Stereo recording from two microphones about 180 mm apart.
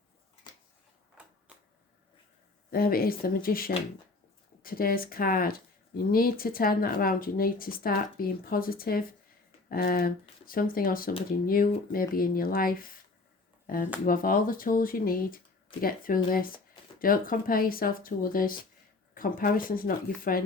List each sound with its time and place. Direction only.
1.5 s tick-tock: 5° right (ahead or behind)
2.7 s speech: 55° left (ahead or behind)